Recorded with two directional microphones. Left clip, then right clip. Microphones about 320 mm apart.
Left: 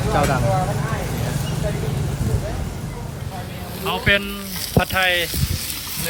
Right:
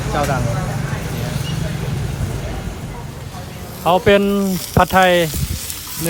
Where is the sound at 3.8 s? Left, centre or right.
Centre.